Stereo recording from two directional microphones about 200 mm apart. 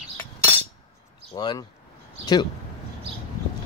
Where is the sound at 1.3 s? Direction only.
20° left (ahead or behind).